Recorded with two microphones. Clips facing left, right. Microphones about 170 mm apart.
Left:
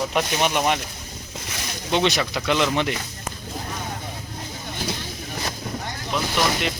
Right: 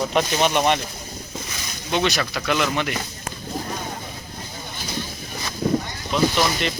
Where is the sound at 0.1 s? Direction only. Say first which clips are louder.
Right 2 dB; 5° left (ahead or behind).